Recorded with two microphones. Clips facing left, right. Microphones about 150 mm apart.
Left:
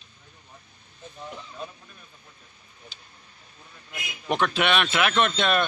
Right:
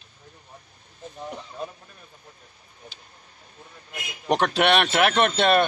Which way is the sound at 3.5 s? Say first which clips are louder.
Right 2 dB; 40° right (ahead or behind).